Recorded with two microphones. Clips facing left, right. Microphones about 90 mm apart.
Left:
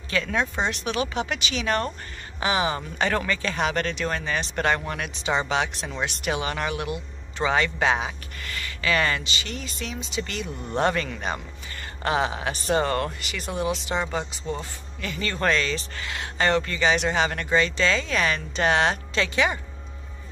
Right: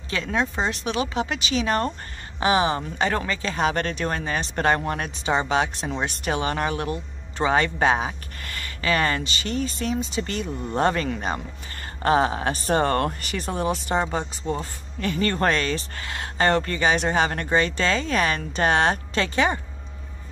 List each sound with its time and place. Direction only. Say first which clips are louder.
0.1 s a man's voice: even; 25° right (ahead or behind)